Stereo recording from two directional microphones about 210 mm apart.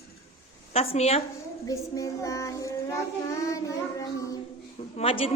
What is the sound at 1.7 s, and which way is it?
A woman's voice, 15° left (ahead or behind).